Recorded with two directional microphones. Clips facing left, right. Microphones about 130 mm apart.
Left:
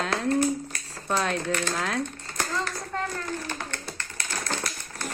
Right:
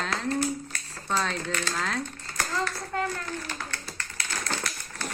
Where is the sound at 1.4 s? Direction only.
20° left (ahead or behind).